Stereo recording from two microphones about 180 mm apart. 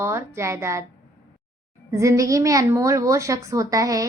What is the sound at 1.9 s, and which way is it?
A woman's voice, 15° right (ahead or behind).